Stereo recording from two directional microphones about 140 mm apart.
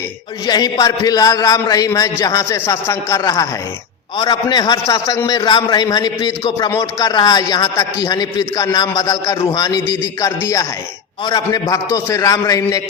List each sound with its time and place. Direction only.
0.4 s a man's voice: 30° left (ahead or behind)